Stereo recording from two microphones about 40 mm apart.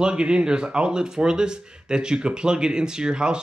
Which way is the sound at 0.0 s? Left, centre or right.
Right.